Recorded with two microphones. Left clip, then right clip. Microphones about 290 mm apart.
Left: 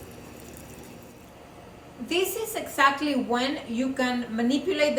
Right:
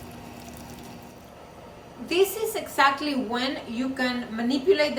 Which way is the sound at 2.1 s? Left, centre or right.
Centre.